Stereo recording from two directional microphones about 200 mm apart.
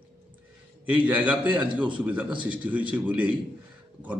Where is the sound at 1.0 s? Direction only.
5° right (ahead or behind).